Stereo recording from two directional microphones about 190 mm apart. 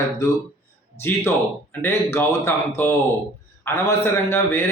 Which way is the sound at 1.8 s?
15° left (ahead or behind).